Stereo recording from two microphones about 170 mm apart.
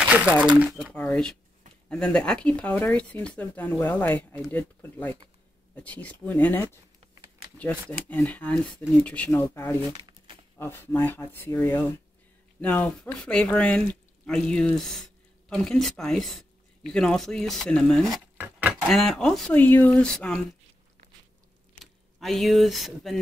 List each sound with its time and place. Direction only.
0.1 s speech: 10° right (ahead or behind)
0.9 s speech: 5° left (ahead or behind)
7.9 s speech: 10° left (ahead or behind)
9.8 s crumpling: 25° right (ahead or behind)
10.6 s speech: 10° left (ahead or behind)
12.5 s speech: 10° left (ahead or behind)
18.4 s a sound: 10° right (ahead or behind)
18.9 s speech: centre (ahead or behind)
22.2 s speech: centre (ahead or behind)